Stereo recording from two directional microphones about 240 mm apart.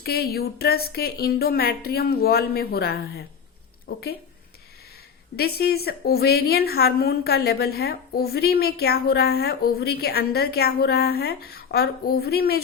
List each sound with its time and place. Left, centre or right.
0.0 s a woman's voice: left
5.4 s a woman's voice: left